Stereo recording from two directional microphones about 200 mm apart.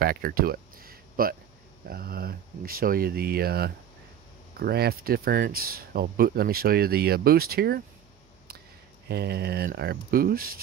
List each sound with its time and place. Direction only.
0.0 s a sound: 45° right (ahead or behind)
1.9 s speech: 50° right (ahead or behind)
9.1 s speech: 55° right (ahead or behind)